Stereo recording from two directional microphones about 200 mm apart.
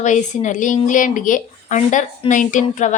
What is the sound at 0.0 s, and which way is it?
A woman's voice, 40° left (ahead or behind).